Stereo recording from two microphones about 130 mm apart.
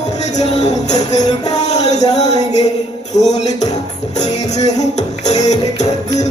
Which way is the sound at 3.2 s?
60° left (ahead or behind).